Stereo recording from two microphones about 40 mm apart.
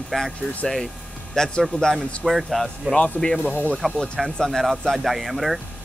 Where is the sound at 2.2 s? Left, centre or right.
Centre.